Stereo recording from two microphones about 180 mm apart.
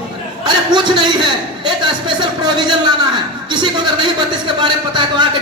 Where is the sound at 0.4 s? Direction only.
25° right (ahead or behind).